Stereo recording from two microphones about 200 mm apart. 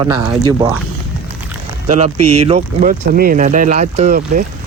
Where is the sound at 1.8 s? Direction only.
35° right (ahead or behind).